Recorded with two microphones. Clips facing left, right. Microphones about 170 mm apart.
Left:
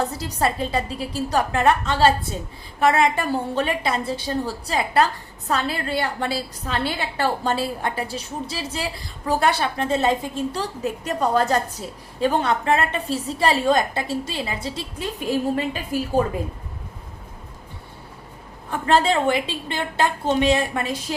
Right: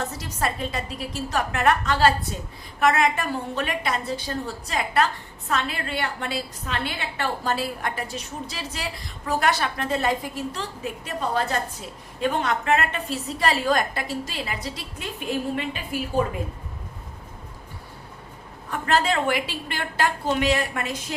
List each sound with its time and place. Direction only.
0.0 s a woman's voice: 35° left (ahead or behind)
12.2 s a woman's voice: 30° left (ahead or behind)
18.7 s a woman's voice: 30° left (ahead or behind)